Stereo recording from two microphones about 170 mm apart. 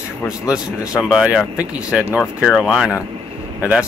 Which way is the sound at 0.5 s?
5° right (ahead or behind).